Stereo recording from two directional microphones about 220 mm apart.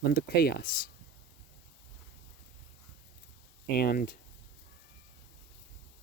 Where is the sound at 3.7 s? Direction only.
45° left (ahead or behind).